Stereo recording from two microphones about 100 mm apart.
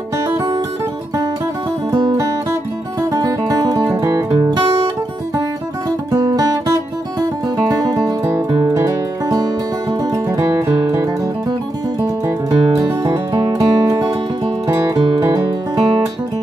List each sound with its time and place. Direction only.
0.2 s music: 30° right (ahead or behind)
3.0 s music: 35° right (ahead or behind)
5.9 s music: 40° right (ahead or behind)
13.1 s music: 45° right (ahead or behind)